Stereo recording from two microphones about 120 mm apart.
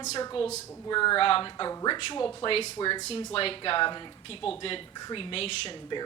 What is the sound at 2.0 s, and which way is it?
Speech, 50° left (ahead or behind).